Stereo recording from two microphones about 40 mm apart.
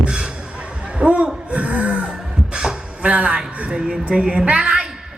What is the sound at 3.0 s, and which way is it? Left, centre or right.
A woman's voice, right.